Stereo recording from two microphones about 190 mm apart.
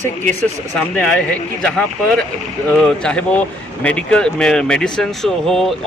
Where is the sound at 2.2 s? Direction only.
5° left (ahead or behind).